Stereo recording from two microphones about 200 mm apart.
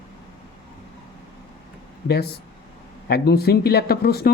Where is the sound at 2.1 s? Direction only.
55° left (ahead or behind).